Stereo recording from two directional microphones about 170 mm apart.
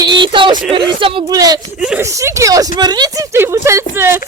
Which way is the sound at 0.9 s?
30° right (ahead or behind).